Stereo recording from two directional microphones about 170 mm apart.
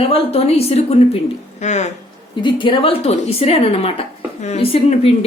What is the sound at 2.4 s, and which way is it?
A woman's voice, 30° left (ahead or behind).